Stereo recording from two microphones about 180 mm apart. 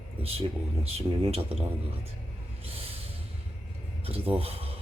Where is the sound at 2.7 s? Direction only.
30° right (ahead or behind).